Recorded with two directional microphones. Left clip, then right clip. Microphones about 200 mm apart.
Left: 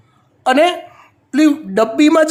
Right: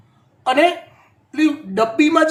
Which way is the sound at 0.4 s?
60° left (ahead or behind).